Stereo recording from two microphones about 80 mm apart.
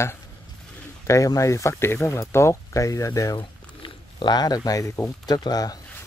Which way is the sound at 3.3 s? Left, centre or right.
Left.